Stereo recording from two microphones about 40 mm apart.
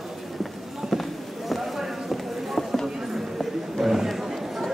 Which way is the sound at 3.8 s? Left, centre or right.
Centre.